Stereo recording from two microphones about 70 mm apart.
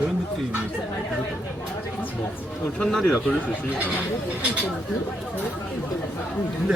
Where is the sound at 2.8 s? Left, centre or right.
Centre.